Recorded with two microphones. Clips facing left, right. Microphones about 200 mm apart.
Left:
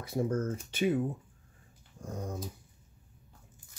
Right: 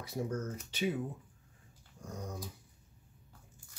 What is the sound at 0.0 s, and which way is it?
Speech, 50° left (ahead or behind).